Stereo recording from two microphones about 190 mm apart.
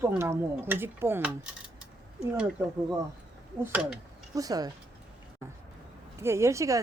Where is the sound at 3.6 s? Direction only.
5° right (ahead or behind).